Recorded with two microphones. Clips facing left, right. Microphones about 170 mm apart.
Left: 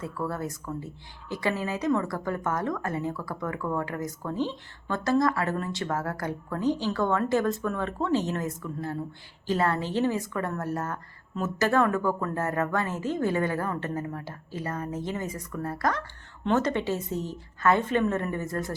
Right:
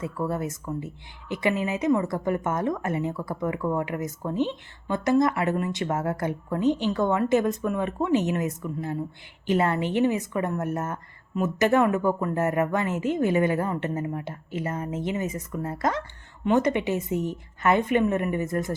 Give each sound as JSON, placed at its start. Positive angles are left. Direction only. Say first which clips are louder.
{"t": 0.0, "sound": "a woman's voice", "louder": "right 3 dB", "side_deg": -20}